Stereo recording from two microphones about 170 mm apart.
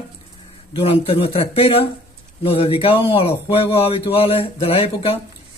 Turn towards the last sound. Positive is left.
turn(degrees=35)  # may be behind; listen again after turning